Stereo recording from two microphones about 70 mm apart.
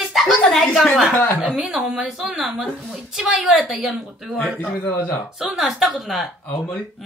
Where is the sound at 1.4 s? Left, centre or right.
Centre.